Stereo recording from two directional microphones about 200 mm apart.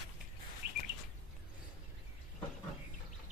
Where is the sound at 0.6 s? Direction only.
50° right (ahead or behind).